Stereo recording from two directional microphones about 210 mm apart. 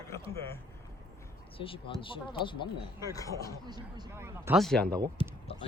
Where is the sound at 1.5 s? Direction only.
25° left (ahead or behind).